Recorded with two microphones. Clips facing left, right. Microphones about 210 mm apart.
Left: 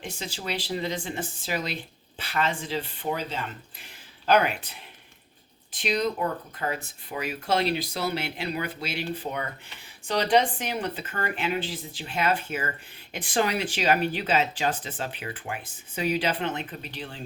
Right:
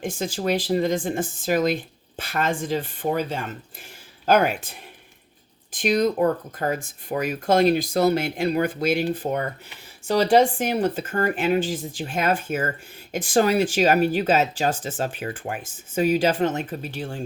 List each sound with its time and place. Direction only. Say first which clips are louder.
0.0 s speech: right 9 dB; 50° right (ahead or behind)